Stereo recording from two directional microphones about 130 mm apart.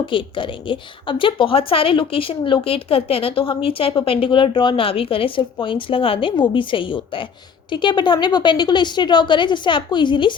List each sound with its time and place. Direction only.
0.0 s a woman's voice: 40° left (ahead or behind)